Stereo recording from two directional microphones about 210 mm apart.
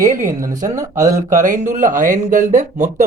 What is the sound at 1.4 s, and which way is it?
Speech, 35° right (ahead or behind).